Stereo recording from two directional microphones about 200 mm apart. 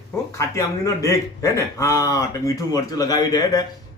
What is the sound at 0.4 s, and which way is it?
A man's voice, 15° left (ahead or behind).